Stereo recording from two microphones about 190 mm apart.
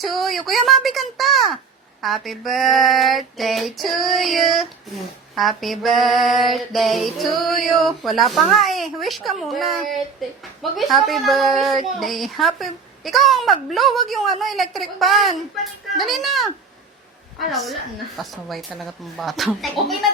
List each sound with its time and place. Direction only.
0.0 s a woman's voice: centre (ahead or behind)
17.5 s a woman's voice: centre (ahead or behind)